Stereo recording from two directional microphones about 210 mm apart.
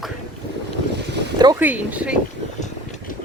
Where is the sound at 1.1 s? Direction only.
55° right (ahead or behind).